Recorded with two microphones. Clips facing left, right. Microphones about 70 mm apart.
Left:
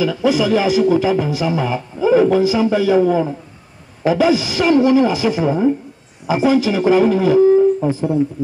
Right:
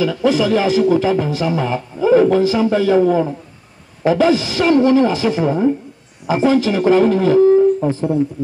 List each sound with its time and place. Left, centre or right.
0.0 s a man's voice: centre